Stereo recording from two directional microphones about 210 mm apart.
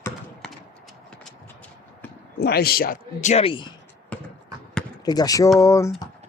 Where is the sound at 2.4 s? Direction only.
50° left (ahead or behind); by 3.7 s 25° left (ahead or behind).